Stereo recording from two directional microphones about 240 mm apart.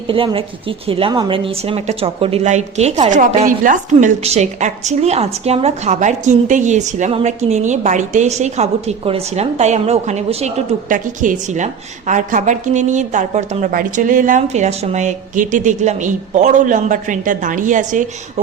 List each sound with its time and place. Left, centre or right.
0.1 s a woman's voice: right